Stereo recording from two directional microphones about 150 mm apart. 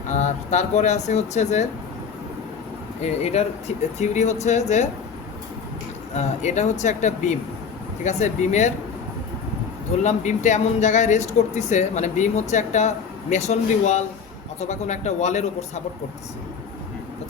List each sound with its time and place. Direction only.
0.1 s speech: 50° left (ahead or behind)
3.0 s speech: 45° left (ahead or behind)
6.1 s speech: 50° left (ahead or behind)
10.0 s speech: 50° left (ahead or behind)